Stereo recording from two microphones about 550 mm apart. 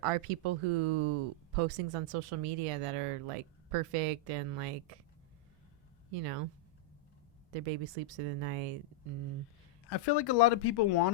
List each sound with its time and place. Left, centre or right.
0.0 s speech: right
6.1 s speech: right
7.5 s speech: right
10.1 s speech: left